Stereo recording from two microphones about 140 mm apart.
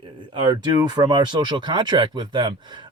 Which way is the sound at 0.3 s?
30° right (ahead or behind).